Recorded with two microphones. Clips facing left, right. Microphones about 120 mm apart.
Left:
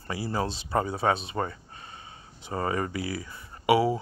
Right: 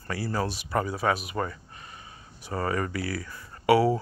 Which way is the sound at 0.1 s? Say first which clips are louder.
Even; 20° left (ahead or behind).